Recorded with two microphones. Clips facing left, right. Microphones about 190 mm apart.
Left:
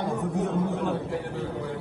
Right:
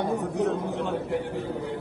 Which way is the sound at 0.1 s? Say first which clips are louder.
Right 2 dB; 70° right (ahead or behind).